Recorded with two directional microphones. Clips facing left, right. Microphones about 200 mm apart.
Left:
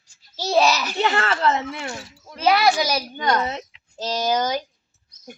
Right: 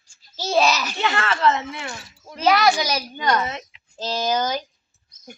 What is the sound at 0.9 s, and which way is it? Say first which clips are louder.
Speech: left 2 dB; 35° left (ahead or behind).